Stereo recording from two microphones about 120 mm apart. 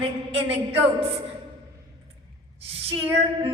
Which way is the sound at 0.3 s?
55° right (ahead or behind).